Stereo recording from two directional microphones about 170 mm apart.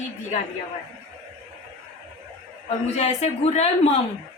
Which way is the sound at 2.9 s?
40° left (ahead or behind).